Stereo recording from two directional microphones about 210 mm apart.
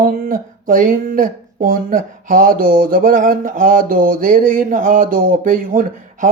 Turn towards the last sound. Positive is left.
turn(degrees=-40)  # may be behind; listen again after turning